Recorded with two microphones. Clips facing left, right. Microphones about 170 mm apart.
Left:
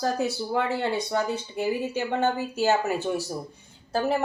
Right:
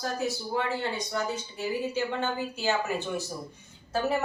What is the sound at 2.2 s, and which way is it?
Speech, 45° left (ahead or behind).